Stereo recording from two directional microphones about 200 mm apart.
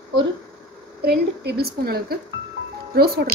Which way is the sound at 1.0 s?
50° right (ahead or behind).